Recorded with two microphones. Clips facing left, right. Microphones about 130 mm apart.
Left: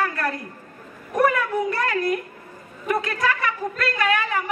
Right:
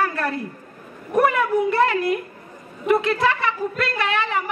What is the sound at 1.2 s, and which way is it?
A woman's voice, 25° right (ahead or behind).